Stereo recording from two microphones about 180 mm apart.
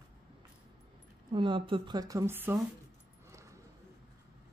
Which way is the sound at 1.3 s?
25° right (ahead or behind).